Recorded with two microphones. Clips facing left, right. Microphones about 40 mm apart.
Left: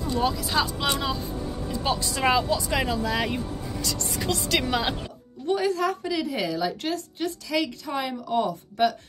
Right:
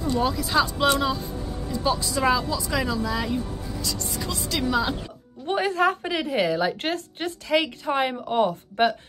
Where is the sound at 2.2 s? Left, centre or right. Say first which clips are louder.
Left 1 dB; left.